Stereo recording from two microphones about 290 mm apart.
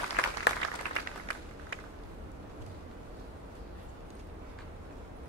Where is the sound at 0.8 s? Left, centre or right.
Right.